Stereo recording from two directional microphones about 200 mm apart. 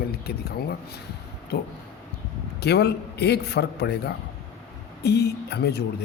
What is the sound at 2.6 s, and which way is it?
Speech, 55° left (ahead or behind).